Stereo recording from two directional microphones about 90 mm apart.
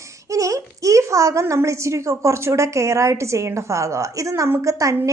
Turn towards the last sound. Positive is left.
turn(degrees=-35)  # may be behind; listen again after turning